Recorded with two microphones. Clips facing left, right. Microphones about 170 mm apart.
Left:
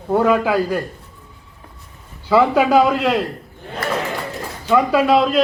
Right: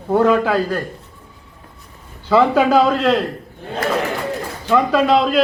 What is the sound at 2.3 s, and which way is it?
Speech, 10° left (ahead or behind).